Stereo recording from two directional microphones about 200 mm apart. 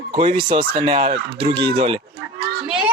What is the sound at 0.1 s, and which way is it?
Speech, 25° right (ahead or behind).